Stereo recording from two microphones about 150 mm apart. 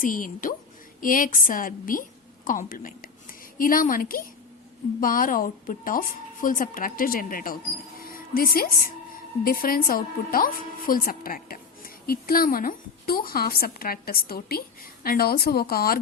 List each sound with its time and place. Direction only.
0.0 s a woman's voice: 65° left (ahead or behind); by 16.0 s 85° left